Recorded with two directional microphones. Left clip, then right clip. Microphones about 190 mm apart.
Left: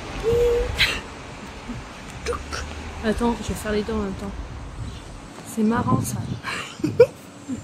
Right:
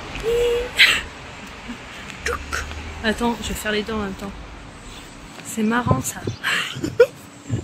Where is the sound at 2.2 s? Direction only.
10° left (ahead or behind).